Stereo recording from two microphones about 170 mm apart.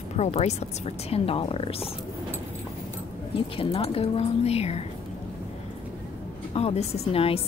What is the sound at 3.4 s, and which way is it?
A woman's voice, 35° left (ahead or behind).